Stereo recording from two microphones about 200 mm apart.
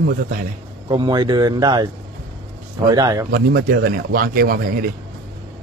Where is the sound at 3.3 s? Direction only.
50° right (ahead or behind).